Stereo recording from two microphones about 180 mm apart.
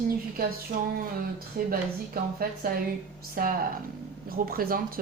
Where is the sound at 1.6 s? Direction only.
55° right (ahead or behind).